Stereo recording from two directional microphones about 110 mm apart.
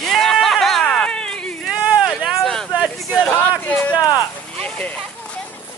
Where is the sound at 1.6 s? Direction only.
Centre (ahead or behind).